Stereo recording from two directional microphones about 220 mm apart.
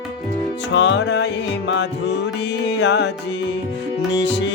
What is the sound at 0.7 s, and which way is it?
Music, 55° left (ahead or behind).